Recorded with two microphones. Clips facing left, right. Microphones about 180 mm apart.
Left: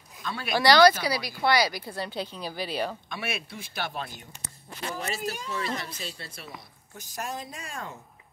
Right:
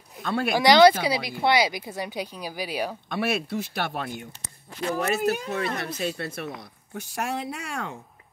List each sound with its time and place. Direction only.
0.2 s speech: 55° right (ahead or behind)
0.5 s speech: 15° right (ahead or behind)
3.1 s speech: 60° right (ahead or behind)
6.9 s speech: 70° right (ahead or behind)